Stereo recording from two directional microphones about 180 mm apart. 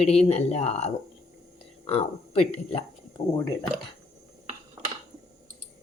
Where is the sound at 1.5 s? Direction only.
30° left (ahead or behind).